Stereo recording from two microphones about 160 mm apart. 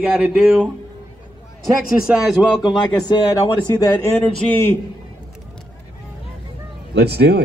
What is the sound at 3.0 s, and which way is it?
Speech, 25° left (ahead or behind).